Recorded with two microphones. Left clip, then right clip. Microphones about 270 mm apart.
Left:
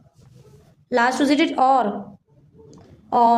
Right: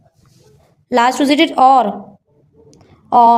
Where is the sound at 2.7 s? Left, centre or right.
Right.